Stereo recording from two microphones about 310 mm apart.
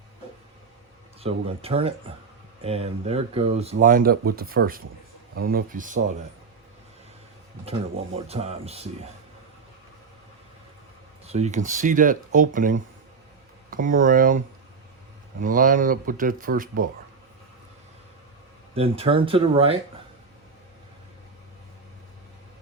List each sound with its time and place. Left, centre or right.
1.2 s speech: centre
7.6 s speech: centre
11.3 s speech: right
18.7 s speech: centre